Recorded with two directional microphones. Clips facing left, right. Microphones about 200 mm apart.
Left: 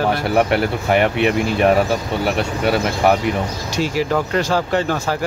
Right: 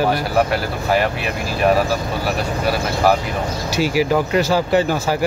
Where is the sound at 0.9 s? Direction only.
25° left (ahead or behind).